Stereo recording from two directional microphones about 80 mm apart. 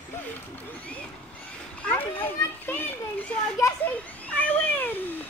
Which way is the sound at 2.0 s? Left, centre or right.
Left.